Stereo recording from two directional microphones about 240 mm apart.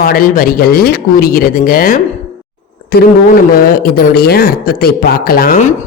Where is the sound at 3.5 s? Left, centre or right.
Left.